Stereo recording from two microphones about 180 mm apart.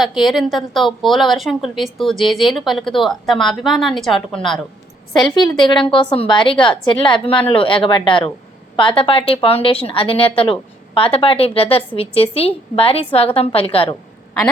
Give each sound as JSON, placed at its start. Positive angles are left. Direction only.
{"t": 0.0, "sound": "a woman's voice", "side_deg": 0}
{"t": 5.1, "sound": "a woman's voice", "side_deg": 25}